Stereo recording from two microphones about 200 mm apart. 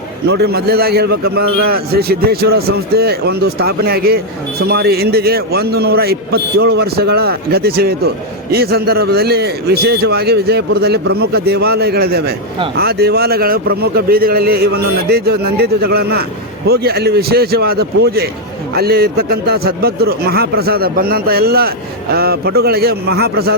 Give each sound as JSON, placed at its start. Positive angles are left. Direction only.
{"t": 0.3, "sound": "a man's voice", "side_deg": -55}